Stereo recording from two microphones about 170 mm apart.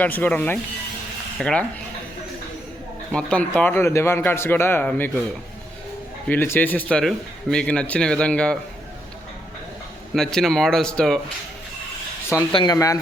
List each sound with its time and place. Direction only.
0.0 s speech: 10° left (ahead or behind)
3.1 s speech: 5° left (ahead or behind)
6.2 s speech: 10° left (ahead or behind)
10.2 s speech: centre (ahead or behind)
12.5 s speech: 20° left (ahead or behind)